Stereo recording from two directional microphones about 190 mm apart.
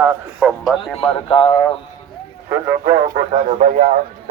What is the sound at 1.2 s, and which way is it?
Speech, 30° left (ahead or behind).